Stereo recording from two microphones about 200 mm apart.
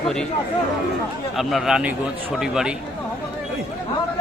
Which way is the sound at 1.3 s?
Centre (ahead or behind).